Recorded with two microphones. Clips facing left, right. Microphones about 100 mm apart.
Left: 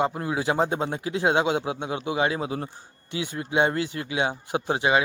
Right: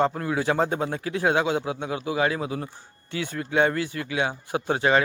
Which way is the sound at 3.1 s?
20° left (ahead or behind).